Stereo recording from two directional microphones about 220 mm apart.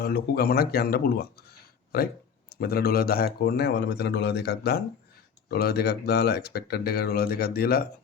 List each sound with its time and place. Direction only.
0.0 s speech: 45° left (ahead or behind)
2.5 s speech: 45° left (ahead or behind)